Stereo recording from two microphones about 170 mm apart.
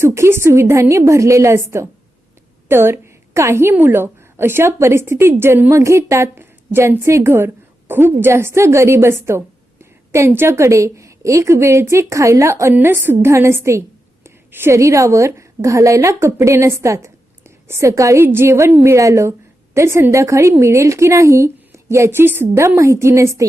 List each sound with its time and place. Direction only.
0.0 s a woman's voice: 15° right (ahead or behind)